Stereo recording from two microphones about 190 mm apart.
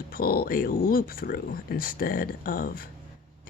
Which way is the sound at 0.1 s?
50° left (ahead or behind).